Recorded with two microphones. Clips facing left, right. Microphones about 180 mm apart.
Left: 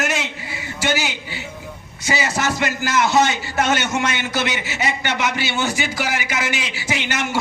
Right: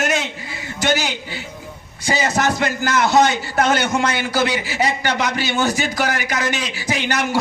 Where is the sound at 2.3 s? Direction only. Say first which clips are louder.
Right 3 dB; 40° right (ahead or behind).